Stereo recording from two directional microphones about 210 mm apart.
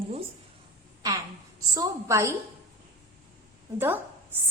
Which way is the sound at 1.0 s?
15° right (ahead or behind).